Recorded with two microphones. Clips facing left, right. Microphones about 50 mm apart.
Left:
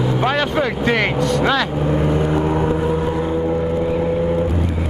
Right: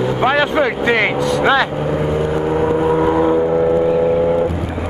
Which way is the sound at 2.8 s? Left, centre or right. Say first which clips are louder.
Right 6 dB; right.